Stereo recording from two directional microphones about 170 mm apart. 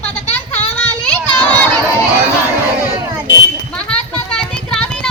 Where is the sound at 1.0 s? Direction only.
10° left (ahead or behind).